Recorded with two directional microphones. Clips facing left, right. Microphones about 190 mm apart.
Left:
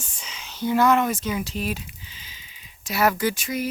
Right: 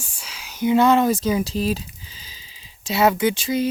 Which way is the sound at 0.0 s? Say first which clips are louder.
Even; 10° right (ahead or behind).